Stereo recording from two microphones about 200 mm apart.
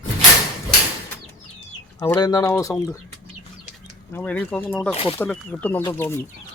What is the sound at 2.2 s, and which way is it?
Speech, 20° left (ahead or behind).